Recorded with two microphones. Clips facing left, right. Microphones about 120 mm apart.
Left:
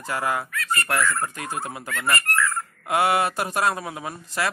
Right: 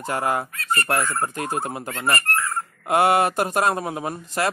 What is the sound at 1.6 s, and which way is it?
Speech, 45° right (ahead or behind).